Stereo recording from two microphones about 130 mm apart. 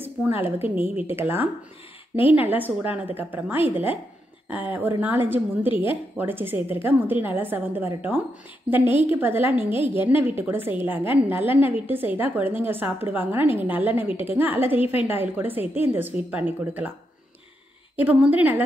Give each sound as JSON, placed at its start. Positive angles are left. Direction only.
{"t": 0.0, "sound": "a woman's voice", "side_deg": -15}
{"t": 17.9, "sound": "a woman's voice", "side_deg": -10}